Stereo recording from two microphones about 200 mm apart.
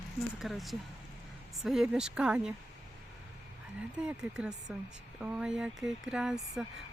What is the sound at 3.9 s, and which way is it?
Speech, 5° right (ahead or behind).